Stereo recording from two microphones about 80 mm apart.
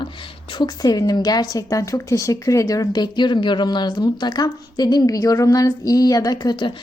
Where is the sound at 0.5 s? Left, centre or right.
Left.